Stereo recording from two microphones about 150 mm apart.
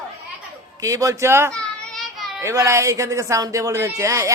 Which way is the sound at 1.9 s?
Centre (ahead or behind).